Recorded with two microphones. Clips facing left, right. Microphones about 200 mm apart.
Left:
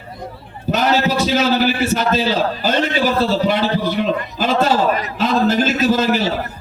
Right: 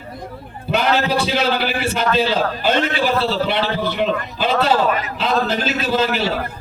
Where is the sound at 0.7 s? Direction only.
40° left (ahead or behind).